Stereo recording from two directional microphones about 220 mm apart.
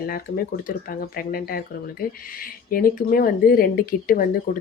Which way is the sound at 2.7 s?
40° left (ahead or behind).